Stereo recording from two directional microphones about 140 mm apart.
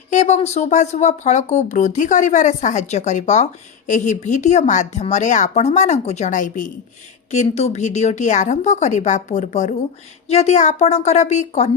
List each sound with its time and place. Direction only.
0.1 s speech: 55° left (ahead or behind)
7.3 s a woman's voice: 55° left (ahead or behind)